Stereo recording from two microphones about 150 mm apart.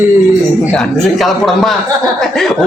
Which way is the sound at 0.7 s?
Centre (ahead or behind).